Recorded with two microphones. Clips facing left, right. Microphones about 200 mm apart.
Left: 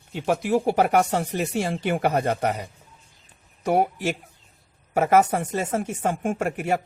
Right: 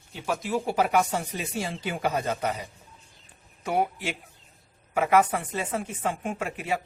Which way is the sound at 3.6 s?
45° left (ahead or behind).